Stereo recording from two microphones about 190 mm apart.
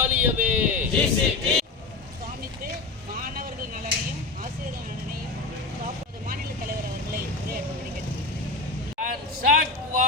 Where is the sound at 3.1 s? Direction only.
45° right (ahead or behind).